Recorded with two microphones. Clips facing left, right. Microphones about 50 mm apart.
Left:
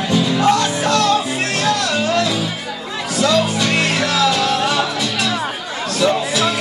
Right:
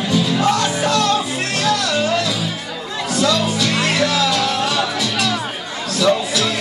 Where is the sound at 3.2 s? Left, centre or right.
Centre.